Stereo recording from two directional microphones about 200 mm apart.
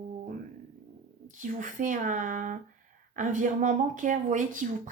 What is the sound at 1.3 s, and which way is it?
A woman's voice, 40° right (ahead or behind).